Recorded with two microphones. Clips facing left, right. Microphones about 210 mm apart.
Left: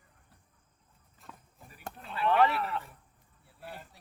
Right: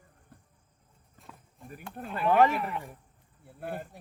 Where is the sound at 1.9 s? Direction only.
50° right (ahead or behind).